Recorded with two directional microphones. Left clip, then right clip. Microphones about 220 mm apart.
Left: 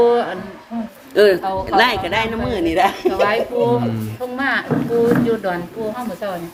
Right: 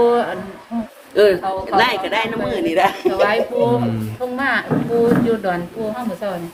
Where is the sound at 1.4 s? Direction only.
Centre (ahead or behind).